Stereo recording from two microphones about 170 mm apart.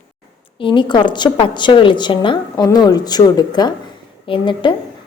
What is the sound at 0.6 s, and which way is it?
A woman's voice, 30° left (ahead or behind).